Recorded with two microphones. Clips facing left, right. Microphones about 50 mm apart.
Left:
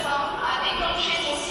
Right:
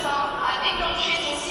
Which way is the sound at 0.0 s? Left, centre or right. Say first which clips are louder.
Right 1 dB; centre.